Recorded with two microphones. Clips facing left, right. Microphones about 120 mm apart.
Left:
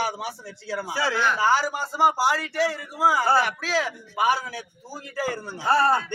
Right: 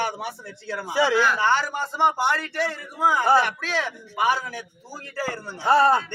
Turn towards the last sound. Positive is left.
turn(degrees=-20)  # may be behind; listen again after turning